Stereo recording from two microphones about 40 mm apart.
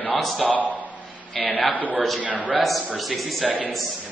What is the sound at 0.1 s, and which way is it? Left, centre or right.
A man's voice, centre.